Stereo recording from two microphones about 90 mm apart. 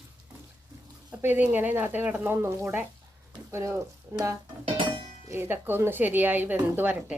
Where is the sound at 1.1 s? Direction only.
20° right (ahead or behind).